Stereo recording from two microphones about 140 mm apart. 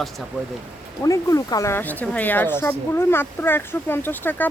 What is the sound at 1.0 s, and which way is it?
Speech, 25° left (ahead or behind).